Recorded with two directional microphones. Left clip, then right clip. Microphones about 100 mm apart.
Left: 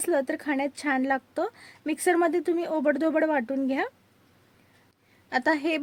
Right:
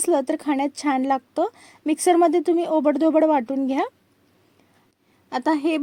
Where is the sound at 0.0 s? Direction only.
50° right (ahead or behind).